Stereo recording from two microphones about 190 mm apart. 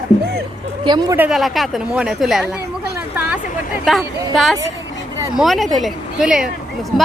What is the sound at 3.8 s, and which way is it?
A woman's voice, centre (ahead or behind).